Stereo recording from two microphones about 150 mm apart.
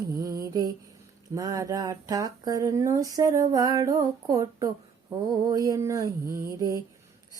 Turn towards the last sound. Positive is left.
turn(degrees=-20)  # may be behind; listen again after turning